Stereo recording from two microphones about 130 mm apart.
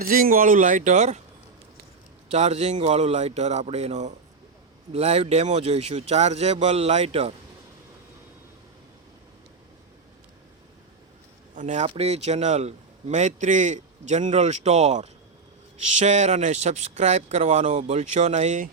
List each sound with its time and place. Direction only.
0.0 s speech: 90° right; by 1.2 s 60° right (ahead or behind)
2.3 s a man's voice: 55° right (ahead or behind)
11.5 s a man's voice: 65° right (ahead or behind)
11.9 s a man's voice: 55° right (ahead or behind); by 18.7 s 70° right (ahead or behind)